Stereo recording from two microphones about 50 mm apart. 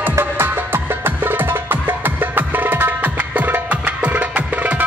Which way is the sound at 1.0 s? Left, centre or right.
Right.